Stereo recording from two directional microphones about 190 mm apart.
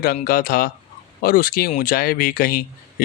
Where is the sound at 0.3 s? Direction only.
50° left (ahead or behind).